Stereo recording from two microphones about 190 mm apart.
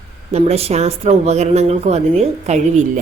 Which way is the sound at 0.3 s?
35° right (ahead or behind).